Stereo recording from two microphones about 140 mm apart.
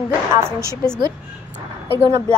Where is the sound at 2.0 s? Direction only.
20° right (ahead or behind).